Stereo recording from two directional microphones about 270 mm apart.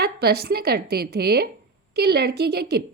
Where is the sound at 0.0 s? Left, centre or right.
Right.